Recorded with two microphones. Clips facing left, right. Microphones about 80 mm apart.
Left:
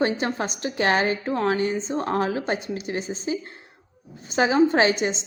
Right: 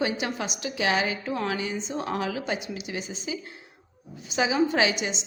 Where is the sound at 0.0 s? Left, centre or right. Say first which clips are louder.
Left 4 dB; left.